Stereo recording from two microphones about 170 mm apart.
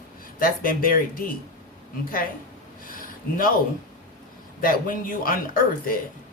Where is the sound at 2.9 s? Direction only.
55° left (ahead or behind).